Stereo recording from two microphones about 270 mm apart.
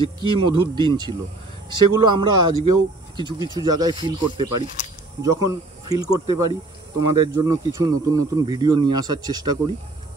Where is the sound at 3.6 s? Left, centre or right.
Centre.